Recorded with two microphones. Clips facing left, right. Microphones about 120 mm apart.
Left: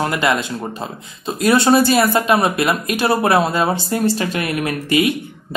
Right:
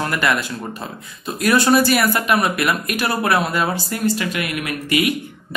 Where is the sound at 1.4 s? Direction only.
25° left (ahead or behind).